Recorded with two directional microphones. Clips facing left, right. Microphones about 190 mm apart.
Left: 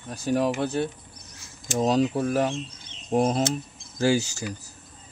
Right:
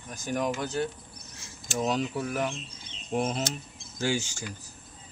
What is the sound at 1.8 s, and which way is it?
Speech, 35° left (ahead or behind).